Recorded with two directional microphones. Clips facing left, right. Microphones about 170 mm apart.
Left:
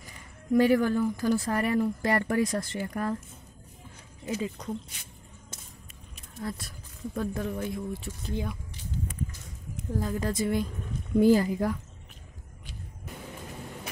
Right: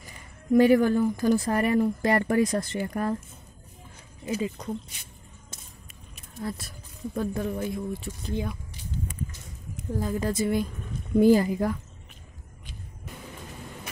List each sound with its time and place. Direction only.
0.5 s speech: 20° right (ahead or behind)
4.2 s speech: 5° right (ahead or behind)
6.1 s a sound: 5° right (ahead or behind)
7.2 s speech: 5° right (ahead or behind)
9.9 s speech: 10° right (ahead or behind)